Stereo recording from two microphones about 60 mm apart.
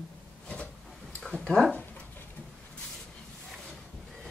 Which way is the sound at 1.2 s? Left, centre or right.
Centre.